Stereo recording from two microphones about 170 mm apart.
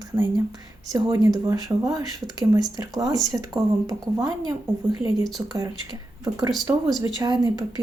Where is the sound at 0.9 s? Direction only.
20° right (ahead or behind).